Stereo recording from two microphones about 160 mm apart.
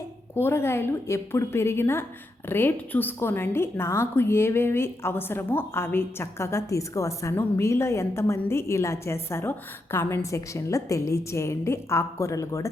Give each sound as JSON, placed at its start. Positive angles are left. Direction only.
{"t": 0.3, "sound": "a woman's voice", "side_deg": 15}